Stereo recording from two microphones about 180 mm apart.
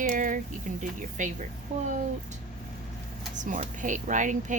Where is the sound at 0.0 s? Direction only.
45° right (ahead or behind).